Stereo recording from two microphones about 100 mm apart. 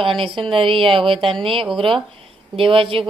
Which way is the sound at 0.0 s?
60° right (ahead or behind).